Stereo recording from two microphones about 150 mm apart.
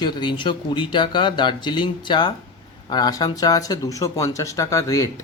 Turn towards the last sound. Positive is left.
turn(degrees=20)  # may be behind; listen again after turning